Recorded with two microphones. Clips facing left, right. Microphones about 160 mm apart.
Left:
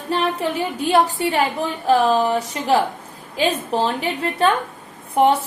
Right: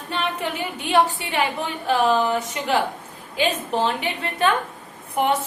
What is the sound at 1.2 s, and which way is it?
A woman's voice, 40° left (ahead or behind).